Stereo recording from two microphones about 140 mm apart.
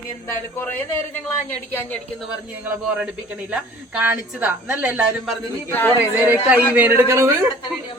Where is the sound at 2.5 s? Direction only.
10° right (ahead or behind).